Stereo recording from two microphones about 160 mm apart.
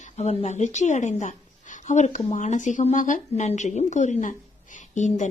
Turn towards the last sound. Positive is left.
turn(degrees=50)  # may be behind; listen again after turning